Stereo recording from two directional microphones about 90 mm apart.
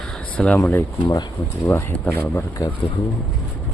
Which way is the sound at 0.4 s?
Centre (ahead or behind).